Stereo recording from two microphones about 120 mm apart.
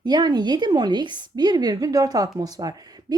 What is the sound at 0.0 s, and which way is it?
A woman's voice, 35° right (ahead or behind).